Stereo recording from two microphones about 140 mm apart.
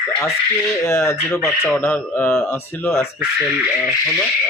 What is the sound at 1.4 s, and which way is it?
Speech, centre (ahead or behind).